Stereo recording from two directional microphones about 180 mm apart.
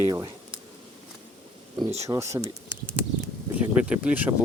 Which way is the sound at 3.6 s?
5° right (ahead or behind).